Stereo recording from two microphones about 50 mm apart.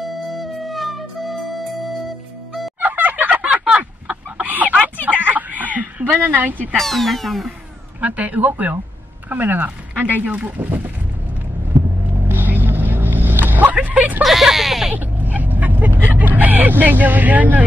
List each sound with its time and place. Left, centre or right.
0.0 s music: centre
2.8 s a sound: right
3.6 s chicken: right
4.5 s chicken: right
5.0 s a sound: right
6.1 s speech: right
6.8 s speech: centre
8.0 s speech: right
12.3 s music: right
13.7 s a sound: right
14.2 s a sound: centre
15.0 s vehicle: right